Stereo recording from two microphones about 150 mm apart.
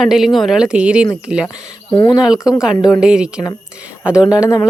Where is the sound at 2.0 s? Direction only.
30° left (ahead or behind).